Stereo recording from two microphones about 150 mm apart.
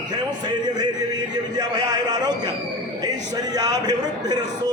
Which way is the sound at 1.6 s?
30° right (ahead or behind).